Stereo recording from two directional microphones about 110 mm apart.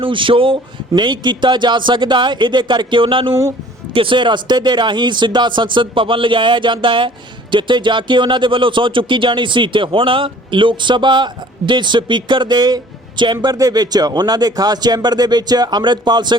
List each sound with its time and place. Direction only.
0.0 s speech: 50° right (ahead or behind)